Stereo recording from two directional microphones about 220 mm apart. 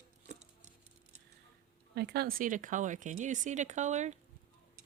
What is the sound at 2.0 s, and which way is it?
Speech, 45° right (ahead or behind).